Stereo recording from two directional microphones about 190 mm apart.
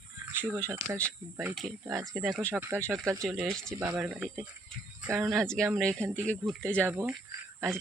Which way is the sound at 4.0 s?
5° right (ahead or behind).